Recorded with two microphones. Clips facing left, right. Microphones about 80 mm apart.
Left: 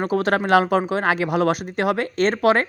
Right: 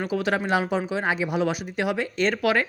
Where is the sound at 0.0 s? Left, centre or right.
Left.